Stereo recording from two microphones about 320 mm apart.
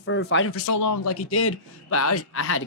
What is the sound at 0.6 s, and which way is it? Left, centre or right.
Speech, left.